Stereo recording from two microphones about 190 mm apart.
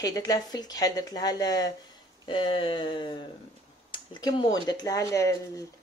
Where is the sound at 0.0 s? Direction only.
20° left (ahead or behind).